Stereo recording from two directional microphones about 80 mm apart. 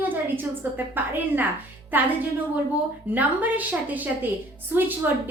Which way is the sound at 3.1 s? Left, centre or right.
Right.